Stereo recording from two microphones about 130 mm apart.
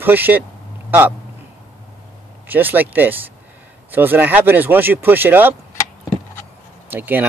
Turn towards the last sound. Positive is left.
turn(degrees=-15)  # may be behind; listen again after turning